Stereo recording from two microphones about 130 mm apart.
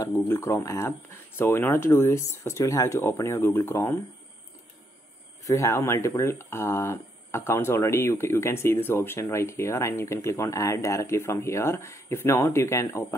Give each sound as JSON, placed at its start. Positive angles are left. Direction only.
{"t": 0.0, "sound": "speech", "side_deg": 20}
{"t": 5.4, "sound": "speech", "side_deg": 20}